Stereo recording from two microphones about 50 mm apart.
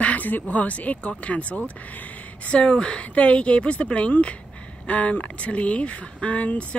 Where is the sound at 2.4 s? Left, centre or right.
Centre.